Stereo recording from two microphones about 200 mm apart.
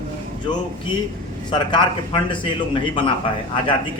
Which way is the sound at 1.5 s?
20° left (ahead or behind).